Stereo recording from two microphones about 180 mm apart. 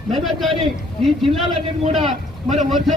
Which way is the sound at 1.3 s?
35° right (ahead or behind).